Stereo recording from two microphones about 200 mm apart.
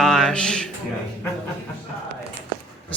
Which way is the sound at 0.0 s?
Centre (ahead or behind).